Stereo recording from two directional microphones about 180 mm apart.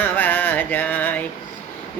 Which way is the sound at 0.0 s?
10° left (ahead or behind).